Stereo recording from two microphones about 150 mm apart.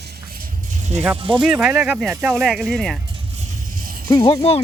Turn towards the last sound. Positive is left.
turn(degrees=20)  # may be behind; listen again after turning